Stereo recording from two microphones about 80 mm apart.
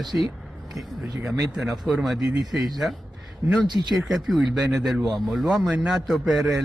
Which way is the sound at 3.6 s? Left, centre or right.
Right.